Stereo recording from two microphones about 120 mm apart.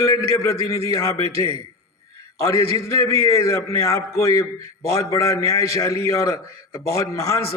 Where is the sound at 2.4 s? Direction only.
25° left (ahead or behind).